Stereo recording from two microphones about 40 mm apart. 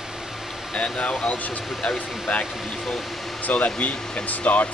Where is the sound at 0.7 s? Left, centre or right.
Left.